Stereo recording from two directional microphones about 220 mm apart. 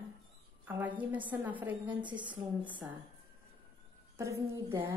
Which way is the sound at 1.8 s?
20° right (ahead or behind).